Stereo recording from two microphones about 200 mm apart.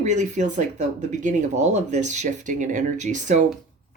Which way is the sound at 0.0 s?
35° right (ahead or behind).